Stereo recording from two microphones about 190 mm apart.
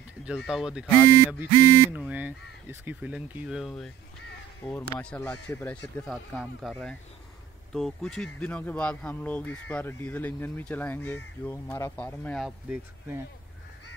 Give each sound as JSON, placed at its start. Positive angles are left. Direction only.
{"t": 0.2, "sound": "speech", "side_deg": -5}